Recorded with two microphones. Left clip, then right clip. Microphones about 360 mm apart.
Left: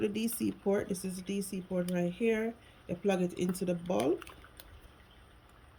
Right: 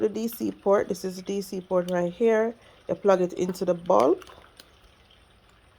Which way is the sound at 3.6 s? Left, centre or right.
Centre.